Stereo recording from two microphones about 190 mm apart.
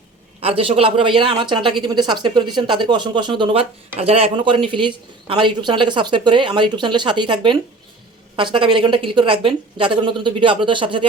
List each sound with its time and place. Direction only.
0.3 s speech: 30° right (ahead or behind)